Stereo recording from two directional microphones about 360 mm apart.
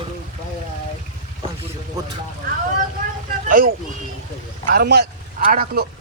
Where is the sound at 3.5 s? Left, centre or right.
Right.